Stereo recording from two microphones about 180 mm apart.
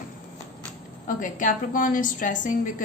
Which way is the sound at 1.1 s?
45° left (ahead or behind).